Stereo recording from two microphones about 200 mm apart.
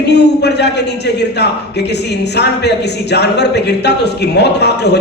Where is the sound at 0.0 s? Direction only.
60° left (ahead or behind).